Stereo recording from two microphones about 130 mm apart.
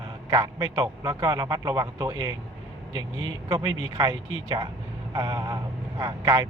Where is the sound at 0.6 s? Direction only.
45° right (ahead or behind).